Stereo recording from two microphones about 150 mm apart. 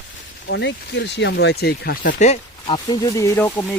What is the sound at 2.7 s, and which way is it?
Speech, 25° left (ahead or behind).